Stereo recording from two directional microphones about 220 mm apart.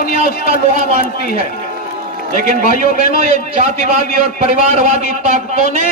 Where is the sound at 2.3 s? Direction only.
40° left (ahead or behind).